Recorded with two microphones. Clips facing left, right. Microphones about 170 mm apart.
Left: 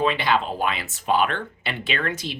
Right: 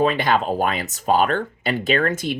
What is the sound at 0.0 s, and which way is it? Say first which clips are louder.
Speech: right 3 dB; 45° right (ahead or behind).